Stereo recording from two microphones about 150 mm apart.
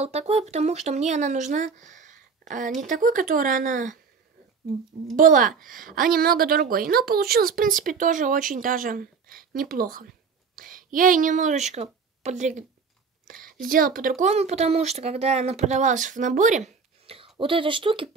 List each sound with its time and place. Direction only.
0.0 s speech: 45° right (ahead or behind)
5.1 s a woman's voice: 65° right (ahead or behind)
13.3 s a woman's voice: 70° right (ahead or behind); by 18.1 s 35° right (ahead or behind)